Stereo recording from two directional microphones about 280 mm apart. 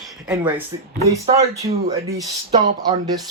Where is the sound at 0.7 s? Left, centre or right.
Centre.